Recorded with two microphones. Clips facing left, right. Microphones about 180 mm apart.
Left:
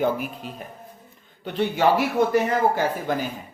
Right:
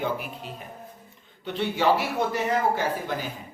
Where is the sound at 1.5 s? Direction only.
45° left (ahead or behind).